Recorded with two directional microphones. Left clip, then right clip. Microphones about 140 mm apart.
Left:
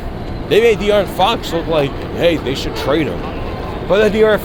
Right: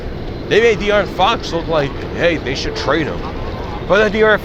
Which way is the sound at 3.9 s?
15° left (ahead or behind).